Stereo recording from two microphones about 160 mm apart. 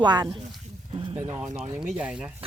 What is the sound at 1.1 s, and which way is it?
Speech, 15° right (ahead or behind).